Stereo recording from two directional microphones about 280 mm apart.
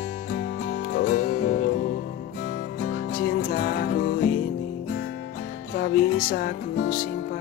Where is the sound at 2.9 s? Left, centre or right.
Left.